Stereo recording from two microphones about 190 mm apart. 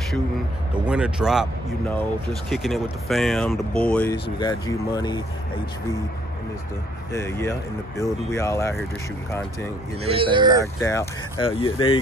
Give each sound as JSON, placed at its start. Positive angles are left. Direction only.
{"t": 0.8, "sound": "speech", "side_deg": -5}
{"t": 2.5, "sound": "speech", "side_deg": 0}
{"t": 4.1, "sound": "speech", "side_deg": 20}
{"t": 7.1, "sound": "speech", "side_deg": 15}
{"t": 10.0, "sound": "speech", "side_deg": -30}
{"t": 10.6, "sound": "speech", "side_deg": 15}
{"t": 11.3, "sound": "speech", "side_deg": 30}